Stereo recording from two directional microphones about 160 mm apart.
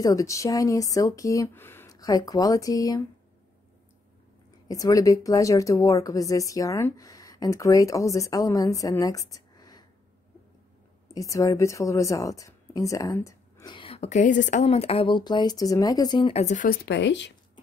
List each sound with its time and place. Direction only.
0.0 s speech: 20° left (ahead or behind)
4.6 s speech: 20° left (ahead or behind)
11.1 s speech: 20° left (ahead or behind); by 16.7 s 50° left (ahead or behind)
16.8 s speech: 90° left